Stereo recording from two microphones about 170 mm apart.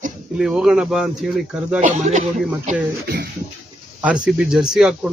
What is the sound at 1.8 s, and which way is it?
Speech, 45° right (ahead or behind).